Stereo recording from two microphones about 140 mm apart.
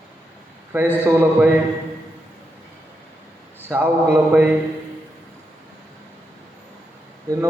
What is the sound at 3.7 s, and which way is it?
Speech, 15° right (ahead or behind).